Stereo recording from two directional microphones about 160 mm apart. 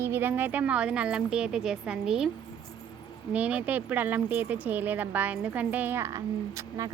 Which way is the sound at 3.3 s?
10° right (ahead or behind).